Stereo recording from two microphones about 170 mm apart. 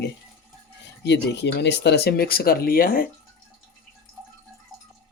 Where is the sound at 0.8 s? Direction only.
90° left; by 3.1 s 60° left (ahead or behind).